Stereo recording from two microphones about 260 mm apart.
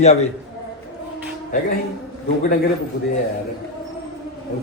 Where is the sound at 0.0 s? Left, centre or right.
Left.